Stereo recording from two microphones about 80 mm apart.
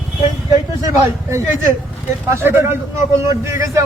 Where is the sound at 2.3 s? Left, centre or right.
Right.